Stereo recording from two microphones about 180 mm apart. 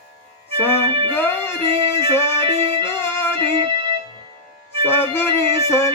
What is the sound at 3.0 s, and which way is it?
Music, 10° left (ahead or behind).